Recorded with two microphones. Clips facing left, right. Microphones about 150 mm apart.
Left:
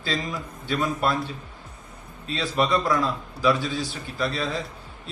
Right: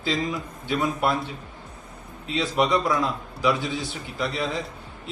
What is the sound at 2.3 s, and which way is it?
A man's voice, 20° right (ahead or behind).